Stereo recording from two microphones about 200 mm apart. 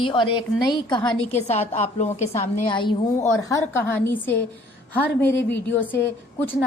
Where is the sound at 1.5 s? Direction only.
35° left (ahead or behind).